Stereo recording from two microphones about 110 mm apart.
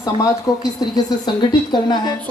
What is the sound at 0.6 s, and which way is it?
A man's voice, 40° left (ahead or behind).